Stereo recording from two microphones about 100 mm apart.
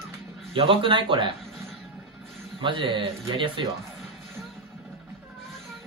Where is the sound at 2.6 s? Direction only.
55° right (ahead or behind).